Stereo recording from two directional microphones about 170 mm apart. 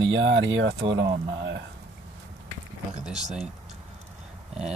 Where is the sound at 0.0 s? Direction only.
90° right.